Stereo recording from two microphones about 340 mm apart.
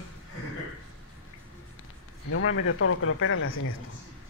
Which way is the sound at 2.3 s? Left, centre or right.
Left.